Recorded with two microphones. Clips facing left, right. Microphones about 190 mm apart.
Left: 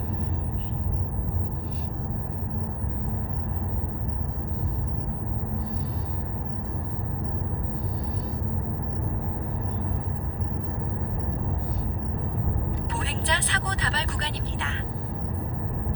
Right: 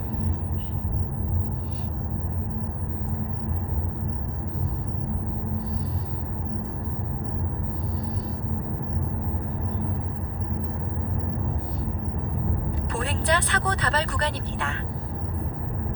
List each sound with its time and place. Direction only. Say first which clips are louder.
12.9 s vehicle: right 8 dB; 50° right (ahead or behind)